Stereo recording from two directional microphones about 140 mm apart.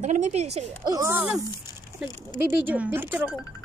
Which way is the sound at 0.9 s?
20° right (ahead or behind).